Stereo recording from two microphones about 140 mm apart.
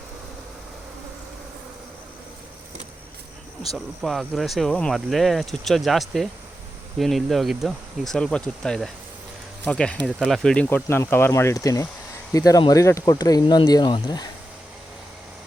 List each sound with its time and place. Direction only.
3.6 s speech: centre (ahead or behind)
10.8 s speech: 20° left (ahead or behind)